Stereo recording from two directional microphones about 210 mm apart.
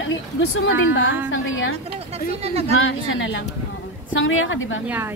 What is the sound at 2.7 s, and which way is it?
A woman's voice, 70° left (ahead or behind).